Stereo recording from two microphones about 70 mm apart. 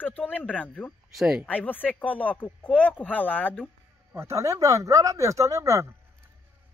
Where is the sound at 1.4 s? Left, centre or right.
Left.